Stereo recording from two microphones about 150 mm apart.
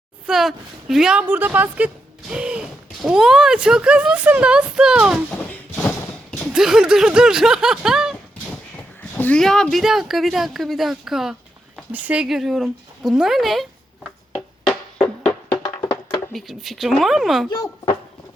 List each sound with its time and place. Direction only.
0.3 s a woman's voice: centre (ahead or behind)
5.3 s a sound: 10° left (ahead or behind)
6.5 s speech: 5° right (ahead or behind)
9.0 s speech: 10° left (ahead or behind)
15.5 s music: 30° left (ahead or behind)
16.3 s speech: centre (ahead or behind)